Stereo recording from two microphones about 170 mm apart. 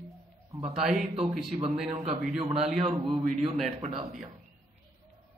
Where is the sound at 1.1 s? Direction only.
35° right (ahead or behind).